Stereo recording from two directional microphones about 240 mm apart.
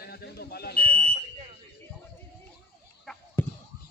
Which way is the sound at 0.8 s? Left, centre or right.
Right.